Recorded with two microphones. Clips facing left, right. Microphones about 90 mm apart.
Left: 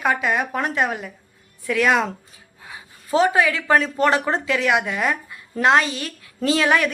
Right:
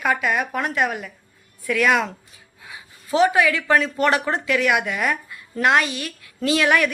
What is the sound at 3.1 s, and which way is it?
A woman's voice, 30° left (ahead or behind).